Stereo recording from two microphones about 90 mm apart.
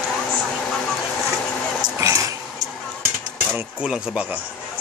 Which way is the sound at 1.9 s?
40° right (ahead or behind).